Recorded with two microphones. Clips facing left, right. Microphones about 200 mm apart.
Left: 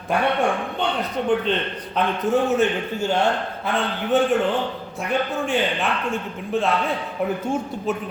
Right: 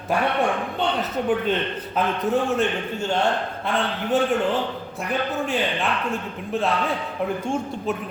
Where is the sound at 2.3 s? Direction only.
Centre (ahead or behind).